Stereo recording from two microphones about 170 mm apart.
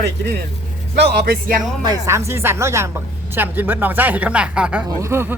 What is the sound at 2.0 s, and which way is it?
Speech, 15° right (ahead or behind).